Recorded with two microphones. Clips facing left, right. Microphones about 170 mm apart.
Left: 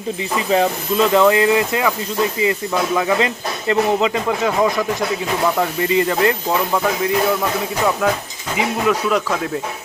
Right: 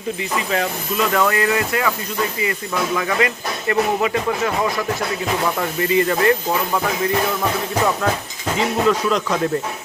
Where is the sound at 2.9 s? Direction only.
20° left (ahead or behind).